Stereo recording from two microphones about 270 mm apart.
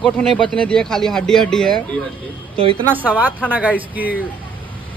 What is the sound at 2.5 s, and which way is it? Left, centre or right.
Speech, centre.